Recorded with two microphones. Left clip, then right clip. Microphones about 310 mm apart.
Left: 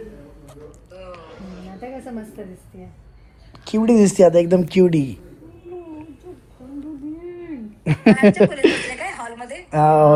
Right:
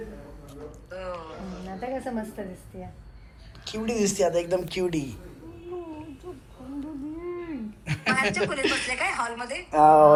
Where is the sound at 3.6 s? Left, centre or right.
Centre.